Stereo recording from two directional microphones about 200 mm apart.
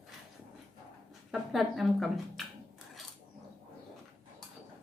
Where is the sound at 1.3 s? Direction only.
Centre (ahead or behind).